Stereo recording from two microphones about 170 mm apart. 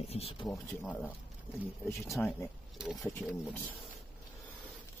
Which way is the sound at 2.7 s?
5° right (ahead or behind).